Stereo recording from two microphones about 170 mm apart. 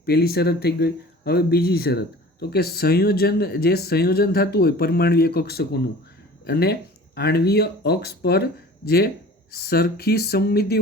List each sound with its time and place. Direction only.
0.0 s speech: 65° left (ahead or behind)